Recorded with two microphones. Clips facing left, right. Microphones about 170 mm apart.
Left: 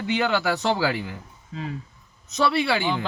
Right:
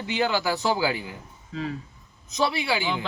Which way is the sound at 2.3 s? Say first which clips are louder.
Left 3 dB; 70° left (ahead or behind).